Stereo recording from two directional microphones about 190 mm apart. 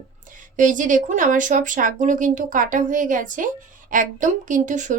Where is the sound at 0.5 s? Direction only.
40° right (ahead or behind).